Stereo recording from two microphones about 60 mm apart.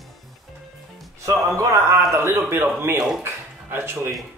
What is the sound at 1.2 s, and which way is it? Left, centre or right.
Speech, right.